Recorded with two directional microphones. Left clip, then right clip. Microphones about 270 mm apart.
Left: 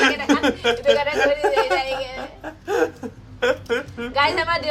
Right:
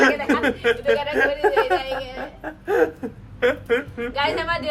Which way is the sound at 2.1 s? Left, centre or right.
Centre.